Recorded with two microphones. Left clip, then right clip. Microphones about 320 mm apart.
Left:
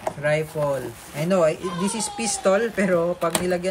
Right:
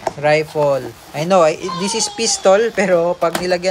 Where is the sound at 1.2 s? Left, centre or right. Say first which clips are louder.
Right 7 dB; centre.